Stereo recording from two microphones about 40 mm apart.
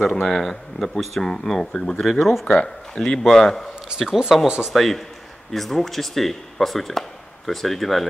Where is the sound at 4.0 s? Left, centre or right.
Centre.